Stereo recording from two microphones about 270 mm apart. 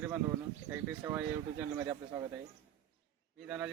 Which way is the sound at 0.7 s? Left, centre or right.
Centre.